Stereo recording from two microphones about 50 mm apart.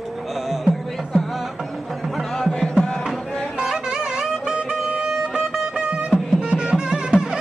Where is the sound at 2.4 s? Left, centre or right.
Centre.